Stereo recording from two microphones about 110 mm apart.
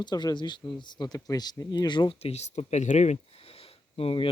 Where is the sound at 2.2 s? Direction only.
75° left (ahead or behind).